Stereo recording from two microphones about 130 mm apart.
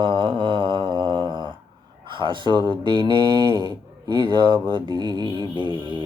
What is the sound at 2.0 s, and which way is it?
Speech, 35° right (ahead or behind).